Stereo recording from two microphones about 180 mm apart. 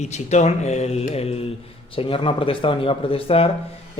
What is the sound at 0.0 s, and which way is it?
A man's voice, 40° left (ahead or behind).